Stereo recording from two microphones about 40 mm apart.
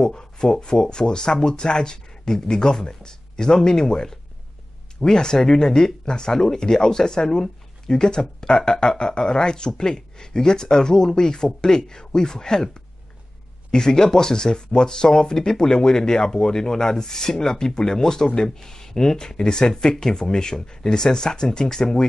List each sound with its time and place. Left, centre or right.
0.0 s speech: centre
13.7 s speech: centre